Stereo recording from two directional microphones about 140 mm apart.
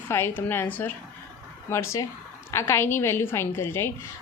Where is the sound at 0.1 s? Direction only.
15° left (ahead or behind).